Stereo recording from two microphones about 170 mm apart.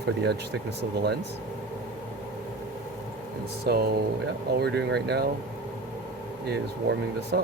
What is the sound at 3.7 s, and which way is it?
Speech, 65° right (ahead or behind).